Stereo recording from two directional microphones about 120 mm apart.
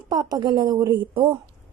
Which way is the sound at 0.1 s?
35° right (ahead or behind).